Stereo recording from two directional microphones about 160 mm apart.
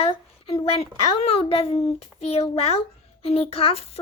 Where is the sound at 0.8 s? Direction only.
40° left (ahead or behind).